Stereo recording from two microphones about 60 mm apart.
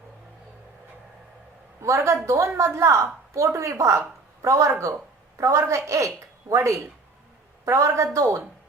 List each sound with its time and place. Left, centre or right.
1.8 s a woman's voice: right